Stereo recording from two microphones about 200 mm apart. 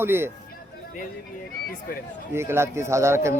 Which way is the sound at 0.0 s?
10° right (ahead or behind).